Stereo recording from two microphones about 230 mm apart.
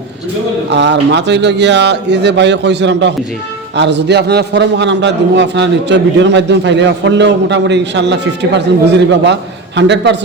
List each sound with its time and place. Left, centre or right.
0.7 s a man's voice: right